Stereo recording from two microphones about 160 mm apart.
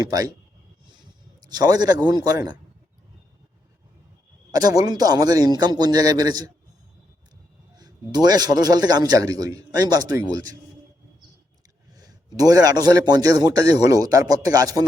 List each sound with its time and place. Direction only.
0.0 s a man's voice: 25° right (ahead or behind)
1.4 s a man's voice: 25° right (ahead or behind)
4.5 s a man's voice: 25° right (ahead or behind)
7.8 s a man's voice: 25° right (ahead or behind)
11.9 s a man's voice: 25° right (ahead or behind)